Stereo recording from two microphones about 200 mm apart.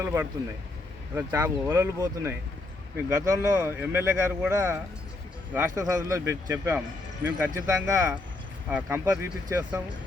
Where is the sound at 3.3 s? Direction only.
15° right (ahead or behind).